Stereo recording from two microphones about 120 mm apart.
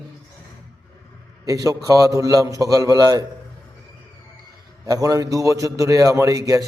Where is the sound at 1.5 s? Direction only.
30° right (ahead or behind).